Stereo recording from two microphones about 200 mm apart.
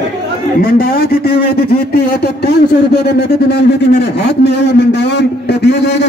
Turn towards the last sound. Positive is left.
turn(degrees=55)  # may be behind; listen again after turning